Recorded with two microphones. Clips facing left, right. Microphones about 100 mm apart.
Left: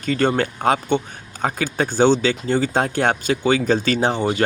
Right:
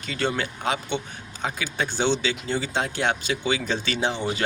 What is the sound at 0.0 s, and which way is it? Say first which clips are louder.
Speech: left 8 dB; 45° left (ahead or behind).